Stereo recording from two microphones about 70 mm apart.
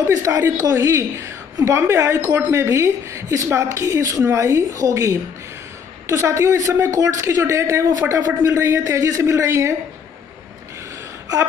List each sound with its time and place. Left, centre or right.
0.0 s a woman's voice: right